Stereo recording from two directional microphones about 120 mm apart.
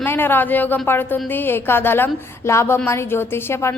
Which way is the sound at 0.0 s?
15° left (ahead or behind).